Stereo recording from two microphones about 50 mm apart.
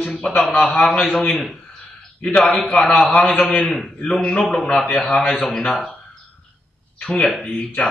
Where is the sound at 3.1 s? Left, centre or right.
Left.